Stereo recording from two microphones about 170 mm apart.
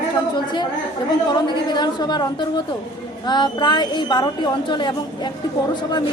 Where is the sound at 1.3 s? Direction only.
25° left (ahead or behind).